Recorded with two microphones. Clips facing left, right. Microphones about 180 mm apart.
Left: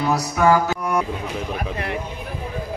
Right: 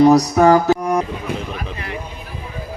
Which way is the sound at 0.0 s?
40° right (ahead or behind).